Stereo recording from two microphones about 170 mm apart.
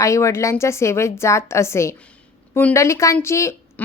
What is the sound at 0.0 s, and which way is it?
Speech, 15° left (ahead or behind).